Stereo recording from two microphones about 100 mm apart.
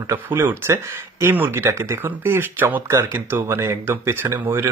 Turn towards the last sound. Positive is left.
turn(degrees=-25)  # may be behind; listen again after turning